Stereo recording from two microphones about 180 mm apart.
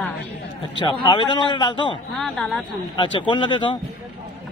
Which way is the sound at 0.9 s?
25° left (ahead or behind).